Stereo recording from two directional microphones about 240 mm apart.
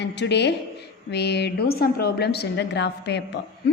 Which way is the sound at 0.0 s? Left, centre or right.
Left.